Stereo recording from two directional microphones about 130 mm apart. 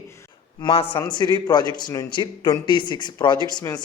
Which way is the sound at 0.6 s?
45° left (ahead or behind).